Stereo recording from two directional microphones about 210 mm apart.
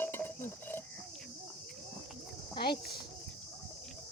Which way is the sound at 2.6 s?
50° left (ahead or behind).